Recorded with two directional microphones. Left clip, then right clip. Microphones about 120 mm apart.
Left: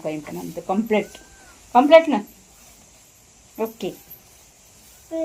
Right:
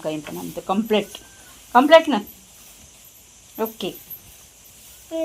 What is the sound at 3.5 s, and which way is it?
Speech, 15° right (ahead or behind).